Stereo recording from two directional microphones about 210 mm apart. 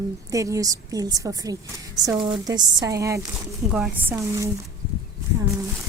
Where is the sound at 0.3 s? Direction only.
15° right (ahead or behind).